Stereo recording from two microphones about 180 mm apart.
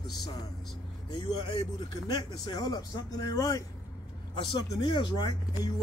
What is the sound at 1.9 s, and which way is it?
Speech, 25° left (ahead or behind).